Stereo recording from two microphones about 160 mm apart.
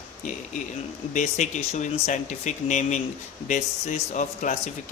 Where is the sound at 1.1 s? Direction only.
50° left (ahead or behind).